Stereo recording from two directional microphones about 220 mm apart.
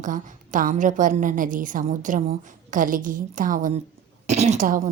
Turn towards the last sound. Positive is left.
turn(degrees=-35)  # may be behind; listen again after turning